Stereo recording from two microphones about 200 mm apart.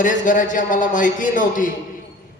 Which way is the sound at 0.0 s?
40° left (ahead or behind).